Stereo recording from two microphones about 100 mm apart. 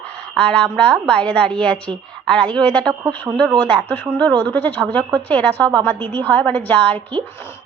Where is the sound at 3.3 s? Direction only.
30° right (ahead or behind).